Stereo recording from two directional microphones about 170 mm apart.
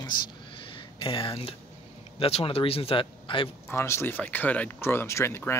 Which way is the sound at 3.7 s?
15° left (ahead or behind).